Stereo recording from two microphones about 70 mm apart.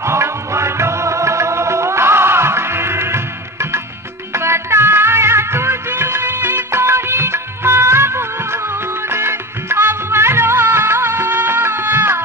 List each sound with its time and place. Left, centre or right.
0.0 s music: right